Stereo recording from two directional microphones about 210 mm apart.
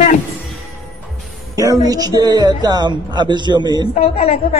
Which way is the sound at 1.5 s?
15° right (ahead or behind).